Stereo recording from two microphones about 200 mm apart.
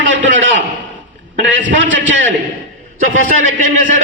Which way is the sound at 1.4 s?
65° right (ahead or behind).